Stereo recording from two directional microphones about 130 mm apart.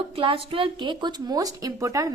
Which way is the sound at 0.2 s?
40° right (ahead or behind).